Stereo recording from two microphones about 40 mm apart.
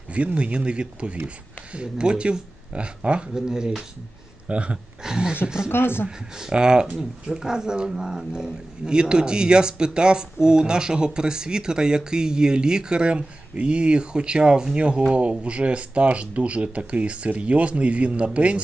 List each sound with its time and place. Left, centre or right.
0.3 s speech: right
3.3 s speech: centre
4.4 s speech: right
5.0 s speech: centre
5.6 s speech: left
6.1 s speech: centre
15.1 s speech: right